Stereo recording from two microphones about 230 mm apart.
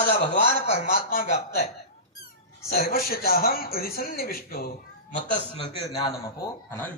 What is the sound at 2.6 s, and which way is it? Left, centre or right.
A man's voice, left.